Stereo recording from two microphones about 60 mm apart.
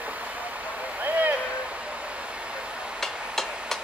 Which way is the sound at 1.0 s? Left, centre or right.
Right.